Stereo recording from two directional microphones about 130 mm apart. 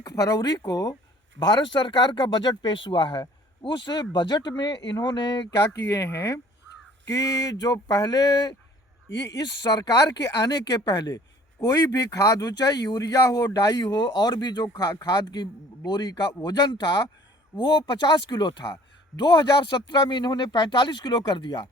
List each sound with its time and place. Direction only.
0.0 s speech: 25° left (ahead or behind)
6.0 s speech: 20° left (ahead or behind)